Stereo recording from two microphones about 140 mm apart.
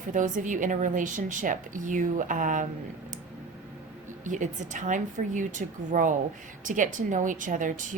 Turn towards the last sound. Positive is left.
turn(degrees=-70)  # may be behind; listen again after turning